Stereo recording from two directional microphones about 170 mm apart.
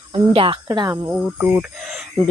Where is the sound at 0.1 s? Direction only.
30° right (ahead or behind).